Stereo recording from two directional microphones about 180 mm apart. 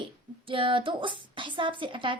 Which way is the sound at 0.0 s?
30° right (ahead or behind).